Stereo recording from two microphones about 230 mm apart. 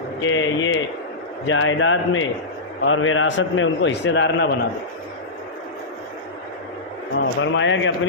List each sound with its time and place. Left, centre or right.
0.2 s a man's voice: left
7.2 s speech: left